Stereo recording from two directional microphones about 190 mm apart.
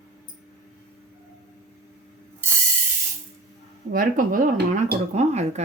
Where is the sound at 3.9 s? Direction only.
45° right (ahead or behind).